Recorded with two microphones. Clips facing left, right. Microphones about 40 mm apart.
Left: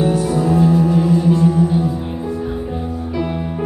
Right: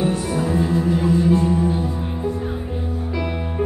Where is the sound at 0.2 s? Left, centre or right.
Right.